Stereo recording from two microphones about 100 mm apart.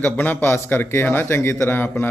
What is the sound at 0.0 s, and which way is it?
A man's voice, 20° left (ahead or behind).